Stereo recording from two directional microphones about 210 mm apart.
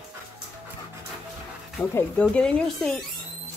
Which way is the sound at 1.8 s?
5° left (ahead or behind).